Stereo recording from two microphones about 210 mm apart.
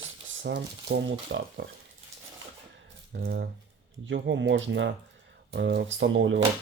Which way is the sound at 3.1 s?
50° right (ahead or behind).